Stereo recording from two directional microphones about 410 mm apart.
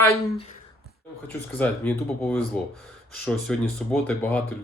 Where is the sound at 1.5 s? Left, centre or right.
Centre.